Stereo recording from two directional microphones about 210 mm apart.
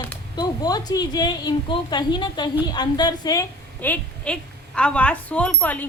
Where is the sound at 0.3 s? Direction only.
20° left (ahead or behind).